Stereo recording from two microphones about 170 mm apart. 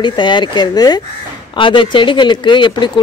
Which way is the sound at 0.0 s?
25° left (ahead or behind).